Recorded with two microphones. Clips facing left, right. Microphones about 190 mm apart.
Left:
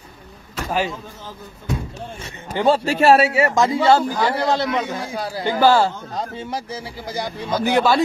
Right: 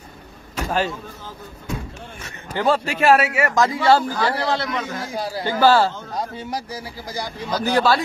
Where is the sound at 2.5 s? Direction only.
25° left (ahead or behind).